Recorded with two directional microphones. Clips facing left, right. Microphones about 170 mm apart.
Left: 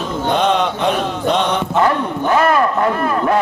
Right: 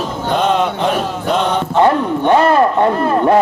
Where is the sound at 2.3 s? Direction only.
30° right (ahead or behind).